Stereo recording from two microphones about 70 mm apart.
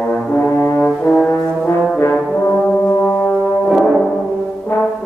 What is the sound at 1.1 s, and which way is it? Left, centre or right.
Brass instrument, left.